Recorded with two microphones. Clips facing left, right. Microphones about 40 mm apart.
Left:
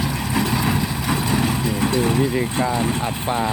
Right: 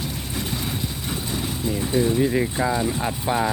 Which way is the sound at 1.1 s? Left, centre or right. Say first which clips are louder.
Left 9 dB; left.